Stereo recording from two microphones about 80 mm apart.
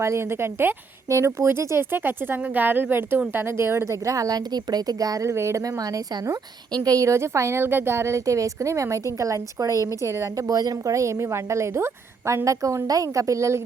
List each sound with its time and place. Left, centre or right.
0.0 s speech: right
4.0 s speech: right
5.3 s speech: right